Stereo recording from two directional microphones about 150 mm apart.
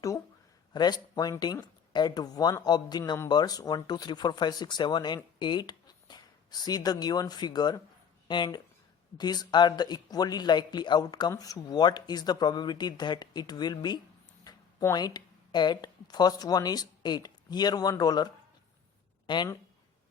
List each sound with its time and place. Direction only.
0.7 s speech: 30° left (ahead or behind)
19.3 s speech: 30° left (ahead or behind)